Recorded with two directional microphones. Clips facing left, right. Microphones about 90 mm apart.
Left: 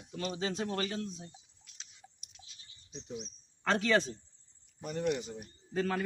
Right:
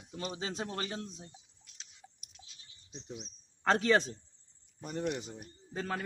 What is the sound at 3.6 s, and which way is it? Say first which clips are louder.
Speech: right 1 dB; 35° right (ahead or behind).